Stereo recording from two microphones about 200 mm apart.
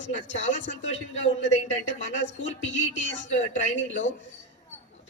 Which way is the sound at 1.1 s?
35° left (ahead or behind).